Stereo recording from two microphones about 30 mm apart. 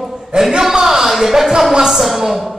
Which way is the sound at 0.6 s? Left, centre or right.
Centre.